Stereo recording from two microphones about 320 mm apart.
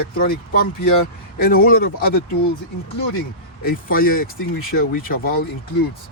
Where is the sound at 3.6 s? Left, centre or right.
Left.